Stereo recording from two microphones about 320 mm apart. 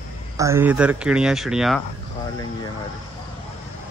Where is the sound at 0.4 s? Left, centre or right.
Centre.